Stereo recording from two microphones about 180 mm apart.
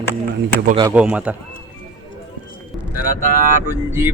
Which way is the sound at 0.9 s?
5° right (ahead or behind).